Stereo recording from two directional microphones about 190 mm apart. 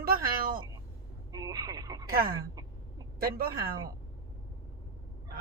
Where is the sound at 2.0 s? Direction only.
50° right (ahead or behind).